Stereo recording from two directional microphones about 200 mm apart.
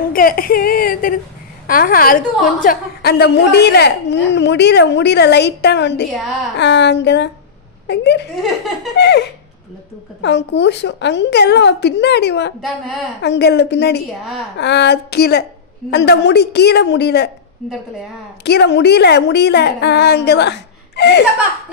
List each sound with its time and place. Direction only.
0.1 s a woman's voice: 45° left (ahead or behind)
10.2 s a woman's voice: 60° left (ahead or behind)
12.6 s a woman's voice: centre (ahead or behind)
13.2 s a woman's voice: 55° left (ahead or behind)
18.4 s a woman's voice: 55° left (ahead or behind)